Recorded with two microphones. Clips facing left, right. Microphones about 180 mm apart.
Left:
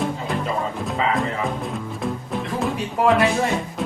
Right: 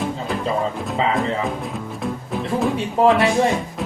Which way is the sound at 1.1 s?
Centre (ahead or behind).